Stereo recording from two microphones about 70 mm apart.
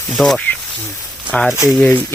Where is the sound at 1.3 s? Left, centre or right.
Centre.